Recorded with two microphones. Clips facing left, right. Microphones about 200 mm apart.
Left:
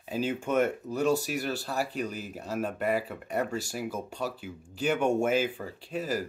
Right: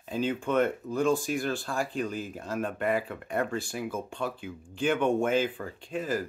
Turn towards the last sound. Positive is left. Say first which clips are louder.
# right 1 dB
turn(degrees=5)  # may be behind; listen again after turning